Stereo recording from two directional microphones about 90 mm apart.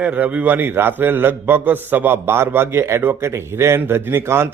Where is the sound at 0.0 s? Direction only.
15° right (ahead or behind).